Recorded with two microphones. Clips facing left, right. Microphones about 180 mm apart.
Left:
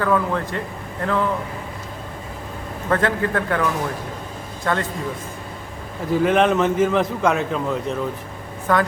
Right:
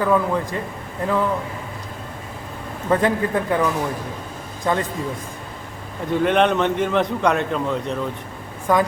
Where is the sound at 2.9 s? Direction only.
15° right (ahead or behind).